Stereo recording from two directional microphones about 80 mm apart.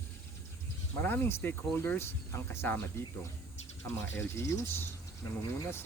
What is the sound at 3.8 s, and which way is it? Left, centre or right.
Speech, left.